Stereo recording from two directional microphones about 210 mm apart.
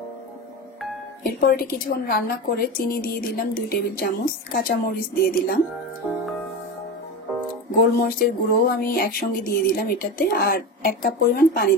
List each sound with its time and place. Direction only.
1.4 s a woman's voice: 45° left (ahead or behind)
8.0 s a woman's voice: 45° left (ahead or behind)